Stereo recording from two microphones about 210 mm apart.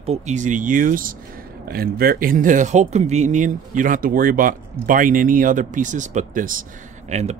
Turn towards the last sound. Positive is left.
turn(degrees=-30)  # may be behind; listen again after turning